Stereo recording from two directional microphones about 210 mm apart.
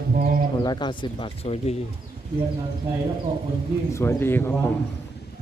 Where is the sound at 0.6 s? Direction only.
20° left (ahead or behind).